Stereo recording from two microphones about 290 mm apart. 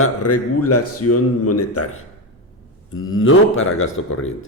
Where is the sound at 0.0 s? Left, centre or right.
Left.